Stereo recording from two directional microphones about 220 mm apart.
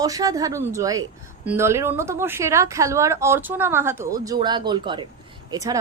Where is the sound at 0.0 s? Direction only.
15° right (ahead or behind).